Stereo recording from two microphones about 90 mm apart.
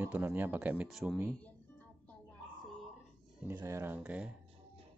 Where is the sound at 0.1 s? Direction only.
20° right (ahead or behind).